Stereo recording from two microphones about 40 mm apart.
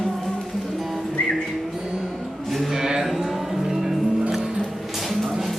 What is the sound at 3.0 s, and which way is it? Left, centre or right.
Music, centre.